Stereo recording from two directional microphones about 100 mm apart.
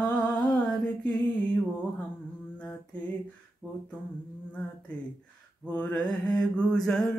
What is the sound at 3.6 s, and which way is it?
Mantra, 15° left (ahead or behind).